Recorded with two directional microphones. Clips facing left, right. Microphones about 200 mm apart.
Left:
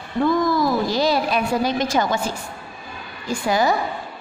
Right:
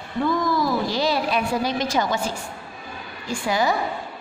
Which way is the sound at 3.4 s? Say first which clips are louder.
Left 3 dB; 45° left (ahead or behind).